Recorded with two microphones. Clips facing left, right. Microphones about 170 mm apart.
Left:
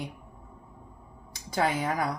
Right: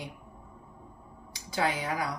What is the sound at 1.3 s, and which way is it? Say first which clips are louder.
Speech: left 3 dB; 50° left (ahead or behind).